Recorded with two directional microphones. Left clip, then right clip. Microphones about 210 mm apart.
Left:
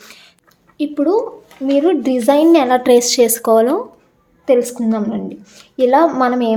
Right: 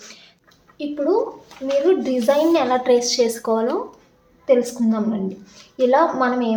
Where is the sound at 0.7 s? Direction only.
50° left (ahead or behind).